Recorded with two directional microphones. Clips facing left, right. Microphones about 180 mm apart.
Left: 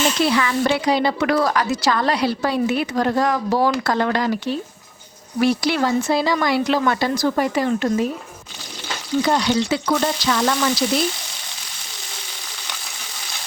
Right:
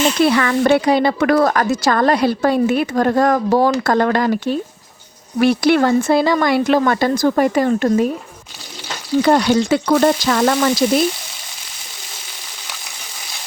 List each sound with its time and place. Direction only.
0.2 s speech: 55° right (ahead or behind)
9.2 s speech: 55° right (ahead or behind)